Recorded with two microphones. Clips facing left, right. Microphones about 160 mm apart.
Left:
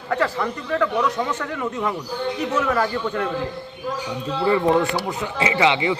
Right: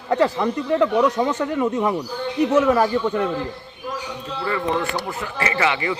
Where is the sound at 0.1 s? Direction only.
20° right (ahead or behind).